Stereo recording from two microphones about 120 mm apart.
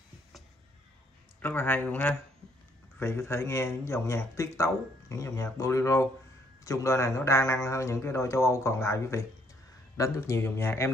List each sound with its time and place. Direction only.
1.4 s a man's voice: 15° left (ahead or behind)